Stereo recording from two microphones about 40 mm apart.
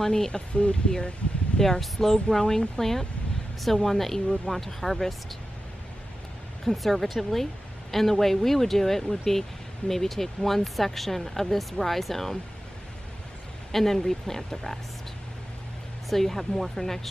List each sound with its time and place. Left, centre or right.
0.0 s speech: centre
0.3 s speech: left
1.6 s speech: centre
6.6 s speech: centre
13.7 s speech: centre
16.1 s speech: centre